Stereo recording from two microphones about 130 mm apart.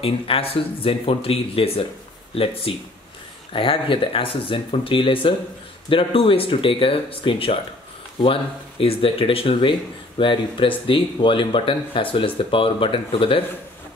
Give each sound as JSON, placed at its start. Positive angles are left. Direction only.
{"t": 0.0, "sound": "speech", "side_deg": 45}